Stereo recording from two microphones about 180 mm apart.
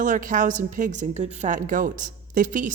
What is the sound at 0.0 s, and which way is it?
A woman's voice, 45° right (ahead or behind).